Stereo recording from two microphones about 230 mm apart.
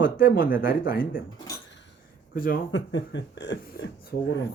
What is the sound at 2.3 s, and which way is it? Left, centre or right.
Speech, left.